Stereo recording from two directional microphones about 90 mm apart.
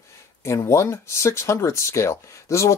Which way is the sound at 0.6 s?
35° left (ahead or behind).